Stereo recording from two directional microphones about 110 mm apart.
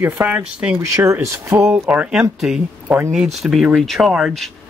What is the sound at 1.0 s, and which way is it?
Speech, 25° right (ahead or behind).